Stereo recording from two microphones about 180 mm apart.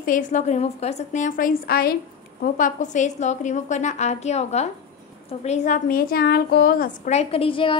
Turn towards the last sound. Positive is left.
turn(degrees=30)  # may be behind; listen again after turning